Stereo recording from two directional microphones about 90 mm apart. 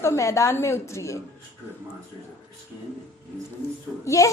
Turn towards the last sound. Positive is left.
turn(degrees=40)  # may be behind; listen again after turning